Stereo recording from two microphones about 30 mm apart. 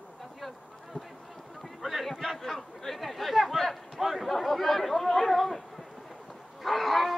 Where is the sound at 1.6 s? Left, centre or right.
Centre.